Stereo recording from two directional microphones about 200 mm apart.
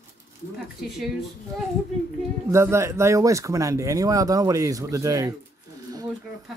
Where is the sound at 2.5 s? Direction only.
15° right (ahead or behind).